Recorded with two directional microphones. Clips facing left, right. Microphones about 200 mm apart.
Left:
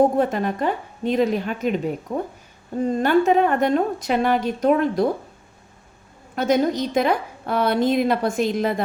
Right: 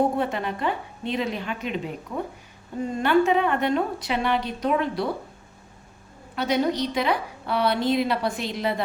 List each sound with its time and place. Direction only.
0.2 s a woman's voice: 45° left (ahead or behind)
6.3 s a woman's voice: 45° left (ahead or behind)